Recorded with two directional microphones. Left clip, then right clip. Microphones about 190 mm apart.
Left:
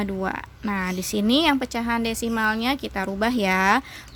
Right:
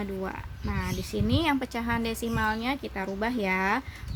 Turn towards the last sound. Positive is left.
turn(degrees=55)  # may be behind; listen again after turning